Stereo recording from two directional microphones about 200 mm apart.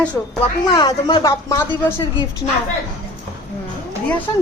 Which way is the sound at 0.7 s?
20° left (ahead or behind).